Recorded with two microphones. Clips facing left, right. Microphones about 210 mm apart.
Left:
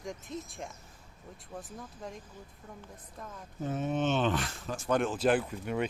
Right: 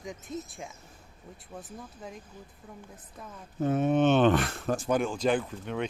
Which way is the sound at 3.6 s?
60° right (ahead or behind).